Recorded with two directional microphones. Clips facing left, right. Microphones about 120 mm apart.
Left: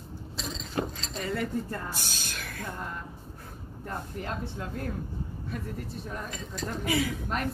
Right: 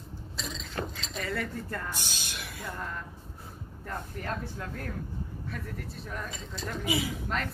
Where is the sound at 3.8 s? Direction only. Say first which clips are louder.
Left 1 dB; 20° left (ahead or behind).